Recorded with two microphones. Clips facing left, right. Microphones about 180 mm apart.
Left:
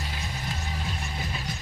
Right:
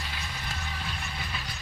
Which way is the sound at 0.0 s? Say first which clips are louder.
Left 4 dB; 40° left (ahead or behind).